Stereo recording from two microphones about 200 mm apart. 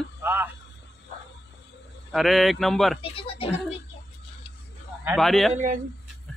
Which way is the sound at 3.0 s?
25° left (ahead or behind).